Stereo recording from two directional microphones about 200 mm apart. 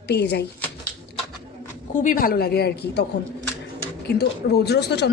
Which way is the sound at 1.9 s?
40° left (ahead or behind).